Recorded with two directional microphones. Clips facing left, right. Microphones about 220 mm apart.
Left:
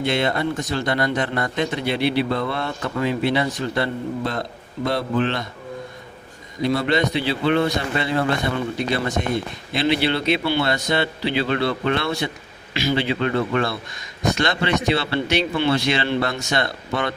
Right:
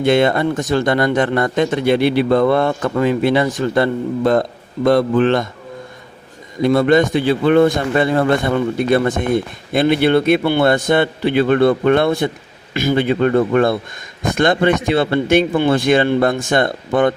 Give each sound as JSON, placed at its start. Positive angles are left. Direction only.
{"t": 0.0, "sound": "speech", "side_deg": -50}
{"t": 6.6, "sound": "speech", "side_deg": -50}